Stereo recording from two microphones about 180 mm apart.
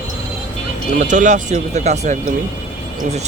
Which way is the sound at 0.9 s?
45° right (ahead or behind).